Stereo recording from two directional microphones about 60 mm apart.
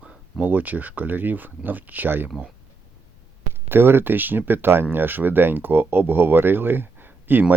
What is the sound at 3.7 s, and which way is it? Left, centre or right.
Speech, right.